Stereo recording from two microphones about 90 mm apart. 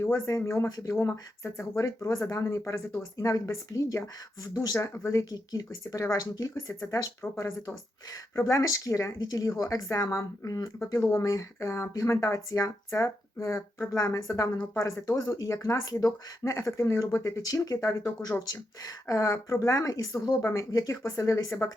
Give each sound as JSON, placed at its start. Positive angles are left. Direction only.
{"t": 0.3, "sound": "a woman's voice", "side_deg": 35}
{"t": 10.8, "sound": "a woman's voice", "side_deg": 30}